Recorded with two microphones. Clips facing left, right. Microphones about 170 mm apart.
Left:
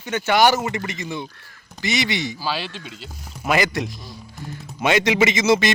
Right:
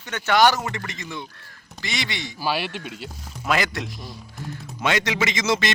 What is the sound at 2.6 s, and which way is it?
Speech, 60° right (ahead or behind).